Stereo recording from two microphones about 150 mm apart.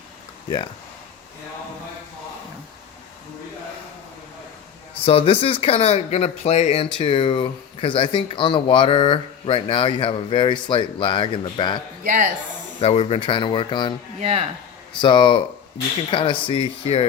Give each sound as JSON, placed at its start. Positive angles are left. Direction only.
{"t": 5.0, "sound": "speech", "side_deg": 40}
{"t": 12.0, "sound": "speech", "side_deg": -60}
{"t": 12.8, "sound": "speech", "side_deg": 40}
{"t": 14.2, "sound": "speech", "side_deg": -40}
{"t": 15.0, "sound": "speech", "side_deg": 30}